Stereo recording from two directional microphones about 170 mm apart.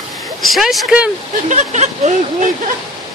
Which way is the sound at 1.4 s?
45° right (ahead or behind).